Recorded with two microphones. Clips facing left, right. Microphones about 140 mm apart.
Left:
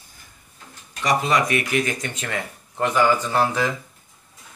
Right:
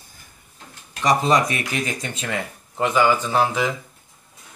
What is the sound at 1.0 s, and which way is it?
Speech, 30° right (ahead or behind).